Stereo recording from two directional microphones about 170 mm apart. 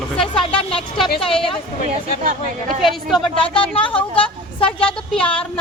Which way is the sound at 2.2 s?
55° right (ahead or behind).